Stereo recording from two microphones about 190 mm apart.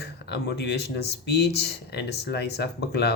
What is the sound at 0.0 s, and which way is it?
Speech, 60° left (ahead or behind).